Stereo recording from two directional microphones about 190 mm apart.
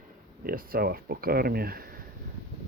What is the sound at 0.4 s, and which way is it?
Speech, 50° right (ahead or behind).